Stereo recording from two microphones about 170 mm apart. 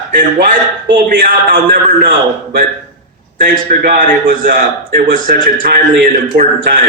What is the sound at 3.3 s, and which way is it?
A man's voice, 55° right (ahead or behind).